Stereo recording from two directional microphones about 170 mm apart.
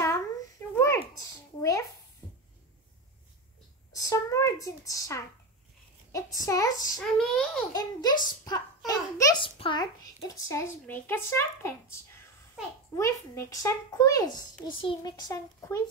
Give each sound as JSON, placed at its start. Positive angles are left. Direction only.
{"t": 0.7, "sound": "a sound", "side_deg": 20}
{"t": 3.9, "sound": "a sound", "side_deg": 20}
{"t": 6.1, "sound": "speech", "side_deg": 20}
{"t": 7.0, "sound": "a child's voice", "side_deg": 5}
{"t": 7.7, "sound": "a woman's voice", "side_deg": 25}
{"t": 12.9, "sound": "speech", "side_deg": 15}